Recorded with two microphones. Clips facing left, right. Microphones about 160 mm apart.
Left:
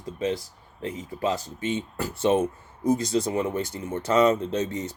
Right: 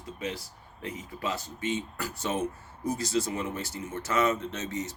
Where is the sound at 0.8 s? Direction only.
30° left (ahead or behind).